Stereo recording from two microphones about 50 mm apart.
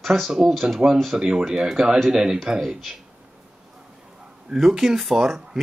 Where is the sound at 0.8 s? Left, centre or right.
Right.